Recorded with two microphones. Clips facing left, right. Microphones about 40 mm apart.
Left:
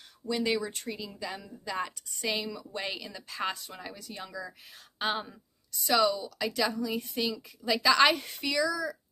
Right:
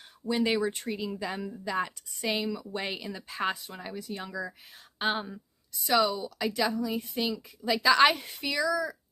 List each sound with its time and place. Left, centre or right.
0.2 s a woman's voice: right